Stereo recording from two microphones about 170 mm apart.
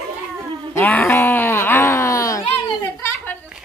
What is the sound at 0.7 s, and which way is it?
Groan, 10° left (ahead or behind).